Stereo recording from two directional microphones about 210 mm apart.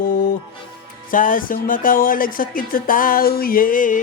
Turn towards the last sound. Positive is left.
turn(degrees=40)  # may be behind; listen again after turning